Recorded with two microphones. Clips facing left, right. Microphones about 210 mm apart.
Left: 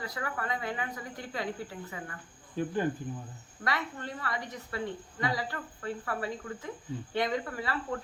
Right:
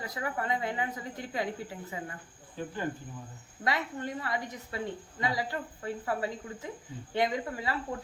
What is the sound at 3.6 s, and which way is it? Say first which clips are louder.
A woman's voice: right 2 dB; 20° right (ahead or behind).